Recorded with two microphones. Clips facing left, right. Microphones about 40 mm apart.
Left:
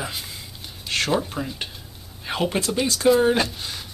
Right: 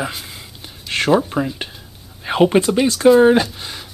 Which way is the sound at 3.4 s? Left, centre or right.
Centre.